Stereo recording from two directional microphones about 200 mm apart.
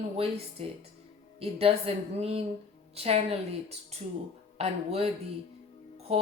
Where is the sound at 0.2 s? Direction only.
30° right (ahead or behind).